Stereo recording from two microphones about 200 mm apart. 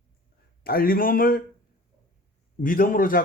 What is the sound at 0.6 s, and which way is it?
Speech, 45° left (ahead or behind).